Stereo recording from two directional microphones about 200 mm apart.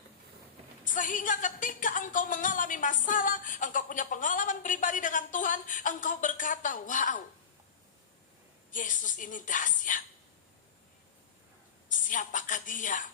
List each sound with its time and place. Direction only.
0.9 s a woman's voice: 40° left (ahead or behind)
8.7 s a woman's voice: 40° left (ahead or behind)
11.9 s a sound: 40° left (ahead or behind)